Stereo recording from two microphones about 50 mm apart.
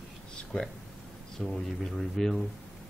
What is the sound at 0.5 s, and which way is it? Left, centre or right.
Speech, centre.